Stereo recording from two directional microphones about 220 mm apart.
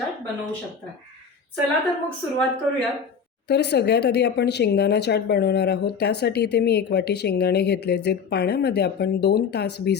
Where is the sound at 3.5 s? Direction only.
50° left (ahead or behind).